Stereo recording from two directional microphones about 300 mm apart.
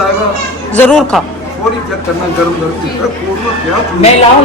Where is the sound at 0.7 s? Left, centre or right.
Centre.